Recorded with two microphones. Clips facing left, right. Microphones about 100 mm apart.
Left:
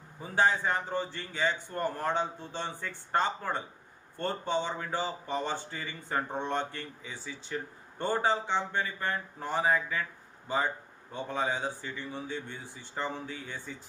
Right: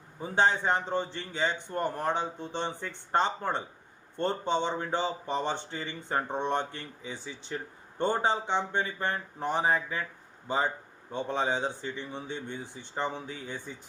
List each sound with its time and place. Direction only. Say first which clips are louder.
0.2 s speech: right 1 dB; 25° right (ahead or behind)
11.1 s speech: right 3 dB; 25° right (ahead or behind)